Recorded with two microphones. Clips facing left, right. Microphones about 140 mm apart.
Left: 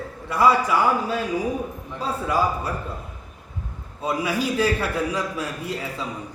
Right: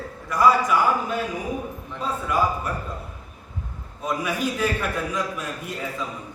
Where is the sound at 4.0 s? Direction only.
30° left (ahead or behind).